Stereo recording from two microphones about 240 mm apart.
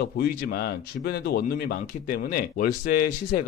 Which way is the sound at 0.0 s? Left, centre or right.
Left.